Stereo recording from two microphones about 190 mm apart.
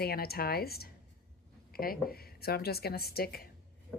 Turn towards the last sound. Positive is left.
turn(degrees=55)  # may be behind; listen again after turning